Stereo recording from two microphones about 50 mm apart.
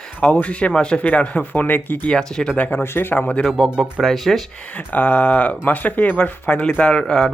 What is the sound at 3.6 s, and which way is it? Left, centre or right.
Speech, centre.